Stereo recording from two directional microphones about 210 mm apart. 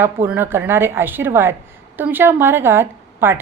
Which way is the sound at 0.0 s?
10° right (ahead or behind).